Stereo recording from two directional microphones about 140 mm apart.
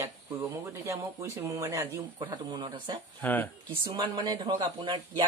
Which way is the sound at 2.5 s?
35° right (ahead or behind).